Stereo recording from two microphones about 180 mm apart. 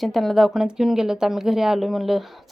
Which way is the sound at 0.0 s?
Centre (ahead or behind).